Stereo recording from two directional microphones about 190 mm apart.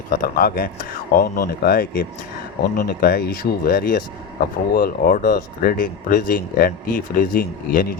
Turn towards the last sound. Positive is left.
turn(degrees=50)  # may be behind; listen again after turning